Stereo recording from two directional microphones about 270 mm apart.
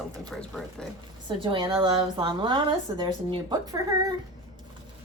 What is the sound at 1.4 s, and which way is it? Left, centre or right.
A woman's voice, centre.